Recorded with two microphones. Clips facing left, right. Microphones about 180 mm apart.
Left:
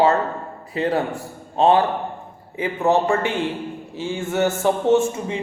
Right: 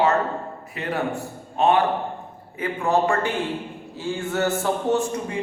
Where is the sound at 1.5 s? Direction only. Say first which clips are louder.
Left 3 dB; 30° left (ahead or behind).